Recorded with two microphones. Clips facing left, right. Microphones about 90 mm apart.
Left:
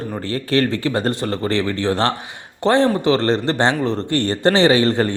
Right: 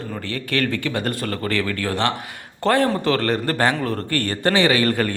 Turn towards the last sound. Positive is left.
turn(degrees=25)  # may be behind; listen again after turning